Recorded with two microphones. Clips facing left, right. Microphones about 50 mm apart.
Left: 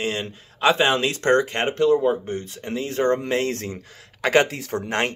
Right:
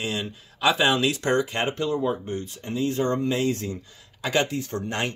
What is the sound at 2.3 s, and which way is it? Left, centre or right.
Speech, left.